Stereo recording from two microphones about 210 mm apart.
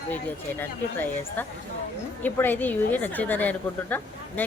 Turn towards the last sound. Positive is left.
turn(degrees=10)  # may be behind; listen again after turning